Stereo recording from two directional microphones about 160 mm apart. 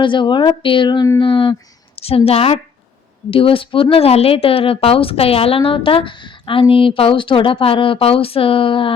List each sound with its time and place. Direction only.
0.0 s a woman's voice: 30° left (ahead or behind)